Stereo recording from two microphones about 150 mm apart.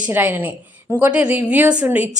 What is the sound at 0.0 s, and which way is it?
A woman's voice, 10° right (ahead or behind).